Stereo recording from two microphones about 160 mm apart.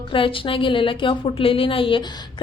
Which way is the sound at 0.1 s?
35° left (ahead or behind).